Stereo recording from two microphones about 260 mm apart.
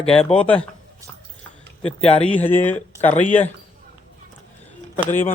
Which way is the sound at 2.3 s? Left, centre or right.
Centre.